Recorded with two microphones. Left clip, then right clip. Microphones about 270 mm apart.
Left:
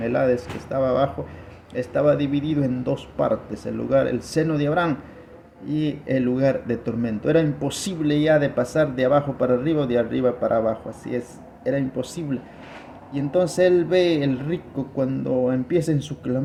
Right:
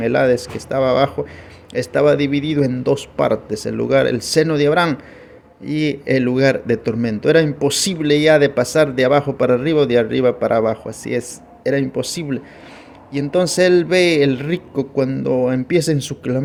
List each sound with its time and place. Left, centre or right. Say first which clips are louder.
0.0 s a man's voice: right 6 dB; right